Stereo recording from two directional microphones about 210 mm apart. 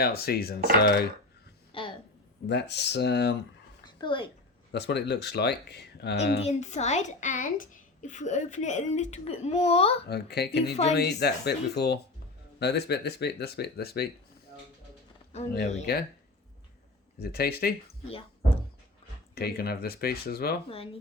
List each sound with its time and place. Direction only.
0.0 s speech: 50° left (ahead or behind)
1.7 s a sound: 25° left (ahead or behind)
2.5 s speech: 55° left (ahead or behind)
3.8 s a woman's voice: 25° left (ahead or behind)
4.7 s speech: 55° left (ahead or behind)
6.4 s speech: 35° left (ahead or behind)
10.1 s speech: 50° left (ahead or behind)
15.9 s speech: 50° left (ahead or behind)
17.2 s speech: 45° left (ahead or behind)
18.1 s speech: 25° left (ahead or behind)
19.3 s speech: 45° left (ahead or behind)
20.7 s speech: 25° left (ahead or behind)